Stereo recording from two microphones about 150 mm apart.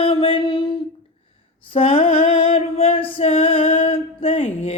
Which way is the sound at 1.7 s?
40° left (ahead or behind).